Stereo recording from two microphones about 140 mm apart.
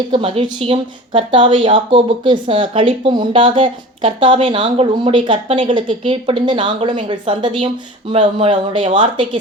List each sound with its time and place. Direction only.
0.1 s a woman's voice: 40° right (ahead or behind)